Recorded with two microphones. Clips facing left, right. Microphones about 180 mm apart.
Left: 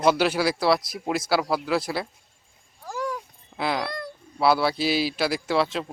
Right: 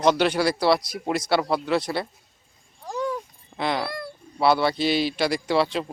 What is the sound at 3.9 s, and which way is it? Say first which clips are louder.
Bird: even; 5° right (ahead or behind).